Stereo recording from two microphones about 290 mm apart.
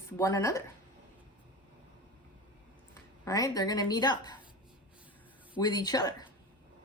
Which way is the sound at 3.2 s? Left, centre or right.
Centre.